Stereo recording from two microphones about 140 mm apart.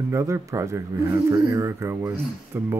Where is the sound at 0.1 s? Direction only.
20° right (ahead or behind).